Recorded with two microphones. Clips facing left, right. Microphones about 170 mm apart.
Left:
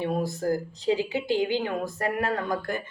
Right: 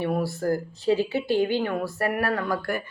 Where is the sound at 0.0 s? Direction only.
20° left (ahead or behind).